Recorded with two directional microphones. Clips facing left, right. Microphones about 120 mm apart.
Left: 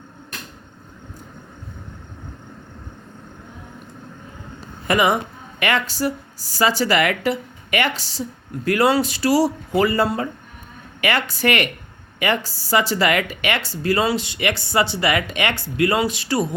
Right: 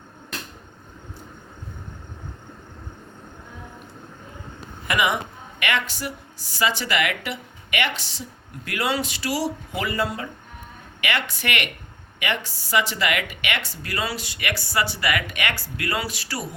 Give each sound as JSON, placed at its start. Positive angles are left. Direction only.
{"t": 4.9, "sound": "speech", "side_deg": 35}